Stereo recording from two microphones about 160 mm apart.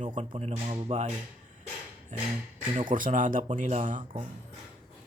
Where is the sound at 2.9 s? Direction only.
55° right (ahead or behind).